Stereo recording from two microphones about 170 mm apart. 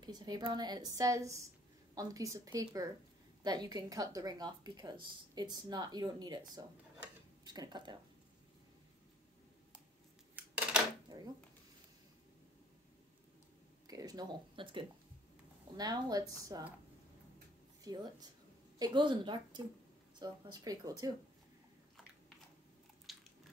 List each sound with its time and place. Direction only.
0.0 s speech: 25° right (ahead or behind)
10.3 s a sound: 5° right (ahead or behind)
11.1 s a sound: 25° right (ahead or behind)
13.8 s speech: 20° right (ahead or behind)
17.8 s speech: 25° right (ahead or behind)
23.1 s biting: centre (ahead or behind)